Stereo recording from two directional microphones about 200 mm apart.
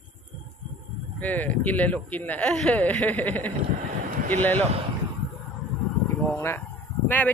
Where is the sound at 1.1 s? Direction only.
10° left (ahead or behind).